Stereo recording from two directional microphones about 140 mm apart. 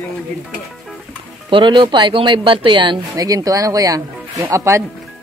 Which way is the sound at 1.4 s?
35° right (ahead or behind).